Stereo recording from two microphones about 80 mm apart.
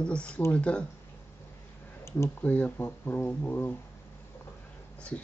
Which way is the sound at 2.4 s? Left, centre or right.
Left.